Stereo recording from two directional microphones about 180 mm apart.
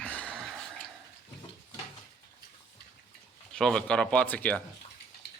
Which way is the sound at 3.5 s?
5° left (ahead or behind).